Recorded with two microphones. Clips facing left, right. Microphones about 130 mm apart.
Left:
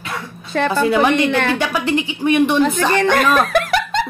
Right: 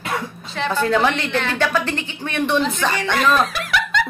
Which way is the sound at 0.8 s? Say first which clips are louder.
Left 3 dB; 10° left (ahead or behind).